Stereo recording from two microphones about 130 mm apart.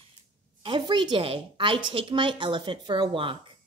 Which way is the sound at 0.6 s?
35° right (ahead or behind).